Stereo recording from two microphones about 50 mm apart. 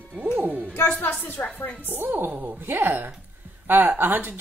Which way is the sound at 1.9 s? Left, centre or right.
Right.